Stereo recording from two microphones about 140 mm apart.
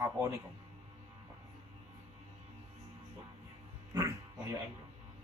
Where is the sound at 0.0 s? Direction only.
20° right (ahead or behind).